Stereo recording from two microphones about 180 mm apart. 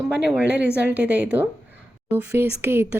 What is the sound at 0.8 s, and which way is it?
Speech, 10° right (ahead or behind).